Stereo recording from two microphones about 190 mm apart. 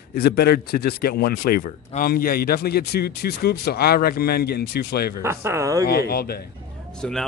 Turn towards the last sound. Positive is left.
turn(degrees=0)  # may be behind; listen again after turning